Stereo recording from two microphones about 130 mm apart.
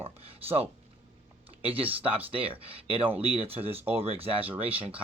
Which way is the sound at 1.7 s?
45° right (ahead or behind).